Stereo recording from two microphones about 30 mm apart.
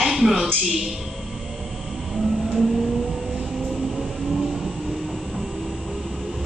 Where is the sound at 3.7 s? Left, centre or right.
Centre.